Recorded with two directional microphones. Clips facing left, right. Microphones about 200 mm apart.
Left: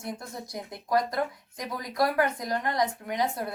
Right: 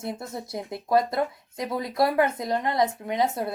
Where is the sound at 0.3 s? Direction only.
25° right (ahead or behind).